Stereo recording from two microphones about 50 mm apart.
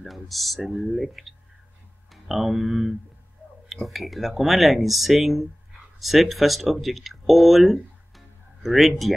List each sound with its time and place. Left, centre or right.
0.0 s speech: centre